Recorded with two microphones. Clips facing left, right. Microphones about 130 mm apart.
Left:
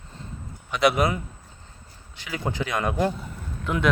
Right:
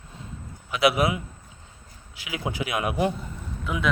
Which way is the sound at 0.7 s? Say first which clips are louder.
Left 1 dB; 5° right (ahead or behind).